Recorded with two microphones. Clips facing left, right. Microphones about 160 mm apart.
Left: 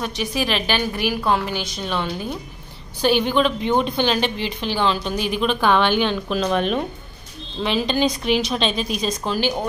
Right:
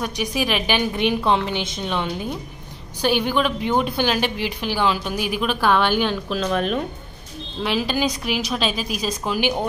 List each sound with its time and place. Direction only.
0.0 s a woman's voice: 15° right (ahead or behind)
1.1 s a woman's voice: 5° left (ahead or behind)
1.4 s a woman's voice: 25° right (ahead or behind)